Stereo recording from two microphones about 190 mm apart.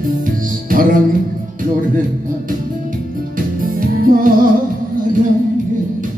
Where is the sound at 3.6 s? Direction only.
50° right (ahead or behind).